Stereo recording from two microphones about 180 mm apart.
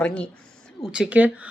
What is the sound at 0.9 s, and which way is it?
Speech, 5° right (ahead or behind).